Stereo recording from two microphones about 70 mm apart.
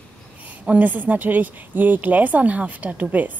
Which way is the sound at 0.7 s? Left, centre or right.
Right.